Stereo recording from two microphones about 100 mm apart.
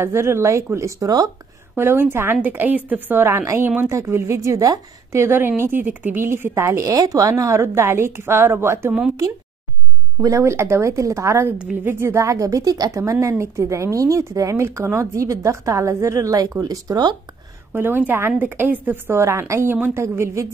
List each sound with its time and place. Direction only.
0.0 s a woman's voice: 25° right (ahead or behind)
1.8 s a woman's voice: 25° right (ahead or behind)
10.2 s a woman's voice: 30° right (ahead or behind)
11.5 s a woman's voice: 15° right (ahead or behind); by 17.2 s 40° right (ahead or behind)
17.7 s a woman's voice: 20° right (ahead or behind)